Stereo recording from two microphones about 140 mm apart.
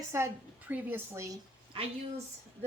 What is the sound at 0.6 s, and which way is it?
Speech, 15° right (ahead or behind).